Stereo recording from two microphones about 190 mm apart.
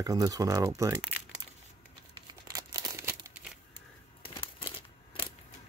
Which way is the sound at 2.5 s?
15° right (ahead or behind).